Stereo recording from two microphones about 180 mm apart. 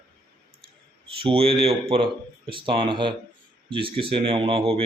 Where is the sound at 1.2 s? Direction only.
30° right (ahead or behind).